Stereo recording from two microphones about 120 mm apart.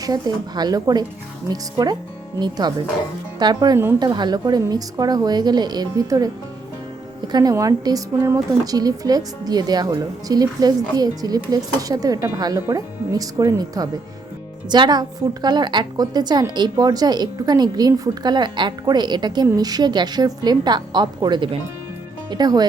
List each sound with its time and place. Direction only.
0.0 s a woman's voice: 35° right (ahead or behind)